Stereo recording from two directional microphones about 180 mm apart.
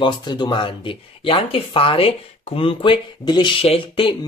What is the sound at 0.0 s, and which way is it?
Speech, 25° left (ahead or behind).